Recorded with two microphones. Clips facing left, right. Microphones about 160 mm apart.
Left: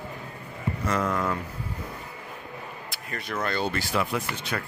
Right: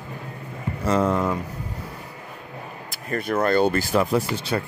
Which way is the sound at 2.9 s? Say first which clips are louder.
Right 10 dB; 50° right (ahead or behind).